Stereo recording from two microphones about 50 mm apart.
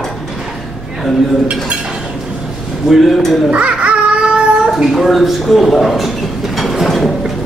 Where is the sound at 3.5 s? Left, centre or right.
Right.